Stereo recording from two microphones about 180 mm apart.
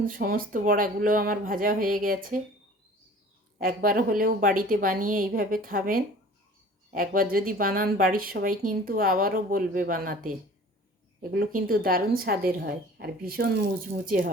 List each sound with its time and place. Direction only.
0.0 s speech: 50° right (ahead or behind)
3.6 s speech: 50° right (ahead or behind)